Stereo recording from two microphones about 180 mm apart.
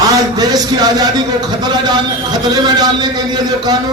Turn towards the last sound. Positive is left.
turn(degrees=-20)  # may be behind; listen again after turning